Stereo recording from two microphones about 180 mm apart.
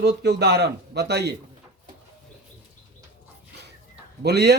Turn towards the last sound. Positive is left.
turn(degrees=-65)  # may be behind; listen again after turning